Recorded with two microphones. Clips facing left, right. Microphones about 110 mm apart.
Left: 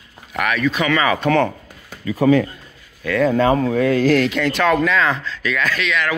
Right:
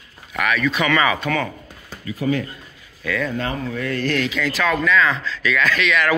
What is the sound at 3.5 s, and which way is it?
Speech, 80° left.